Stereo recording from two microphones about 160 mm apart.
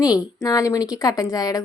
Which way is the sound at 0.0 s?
20° left (ahead or behind).